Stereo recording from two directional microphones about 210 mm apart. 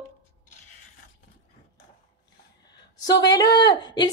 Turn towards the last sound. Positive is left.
turn(degrees=20)  # may be behind; listen again after turning